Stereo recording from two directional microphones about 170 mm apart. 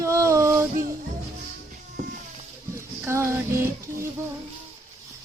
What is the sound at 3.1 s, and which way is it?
Music, 15° right (ahead or behind).